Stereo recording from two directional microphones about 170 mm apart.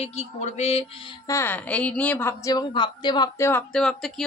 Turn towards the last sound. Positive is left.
turn(degrees=0)  # may be behind; listen again after turning